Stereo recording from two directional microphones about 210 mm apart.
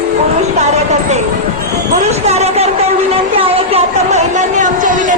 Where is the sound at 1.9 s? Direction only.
30° right (ahead or behind).